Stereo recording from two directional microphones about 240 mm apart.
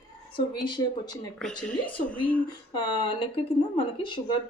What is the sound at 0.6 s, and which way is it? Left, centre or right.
Speech, centre.